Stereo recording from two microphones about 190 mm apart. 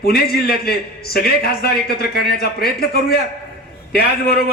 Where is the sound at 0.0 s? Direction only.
55° left (ahead or behind).